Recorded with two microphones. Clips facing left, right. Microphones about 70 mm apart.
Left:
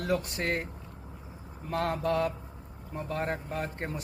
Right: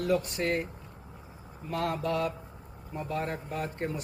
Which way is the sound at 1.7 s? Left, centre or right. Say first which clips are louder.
Left 1 dB; left.